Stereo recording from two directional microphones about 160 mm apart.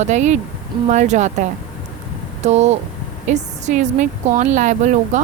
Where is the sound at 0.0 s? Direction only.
45° right (ahead or behind).